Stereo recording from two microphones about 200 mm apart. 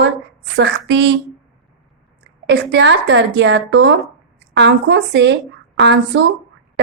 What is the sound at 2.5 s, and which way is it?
Speech, 60° right (ahead or behind).